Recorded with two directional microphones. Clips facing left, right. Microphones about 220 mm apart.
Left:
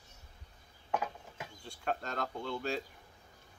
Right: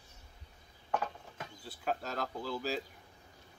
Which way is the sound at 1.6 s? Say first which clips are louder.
Even; 5° right (ahead or behind).